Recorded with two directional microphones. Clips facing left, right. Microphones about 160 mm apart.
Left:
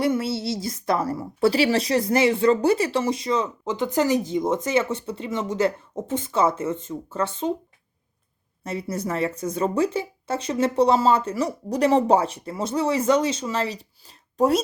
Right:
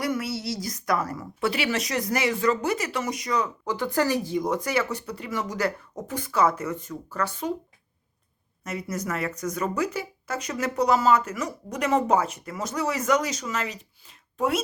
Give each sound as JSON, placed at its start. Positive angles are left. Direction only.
{"t": 0.0, "sound": "a woman's voice", "side_deg": 25}
{"t": 8.6, "sound": "a woman's voice", "side_deg": 30}